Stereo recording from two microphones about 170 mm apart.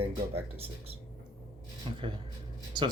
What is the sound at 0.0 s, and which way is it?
Speech, 35° right (ahead or behind).